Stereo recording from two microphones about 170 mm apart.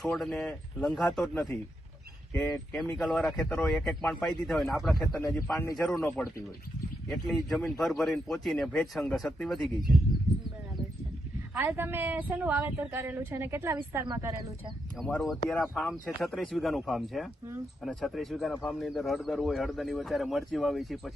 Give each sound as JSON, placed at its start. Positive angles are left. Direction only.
{"t": 0.0, "sound": "speech", "side_deg": 5}
{"t": 5.5, "sound": "a man's voice", "side_deg": 20}
{"t": 5.7, "sound": "a man's voice", "side_deg": 0}
{"t": 7.5, "sound": "speech", "side_deg": 5}
{"t": 11.6, "sound": "a woman's voice", "side_deg": -15}
{"t": 14.9, "sound": "speech", "side_deg": 0}